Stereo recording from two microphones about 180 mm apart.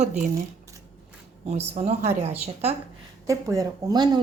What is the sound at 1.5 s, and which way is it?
A woman's voice, 35° right (ahead or behind).